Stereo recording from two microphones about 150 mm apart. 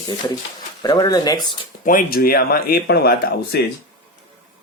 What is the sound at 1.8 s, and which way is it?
Speech, 65° left (ahead or behind).